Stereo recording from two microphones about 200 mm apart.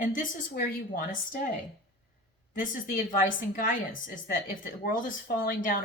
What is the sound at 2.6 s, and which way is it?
A woman's voice, 45° left (ahead or behind).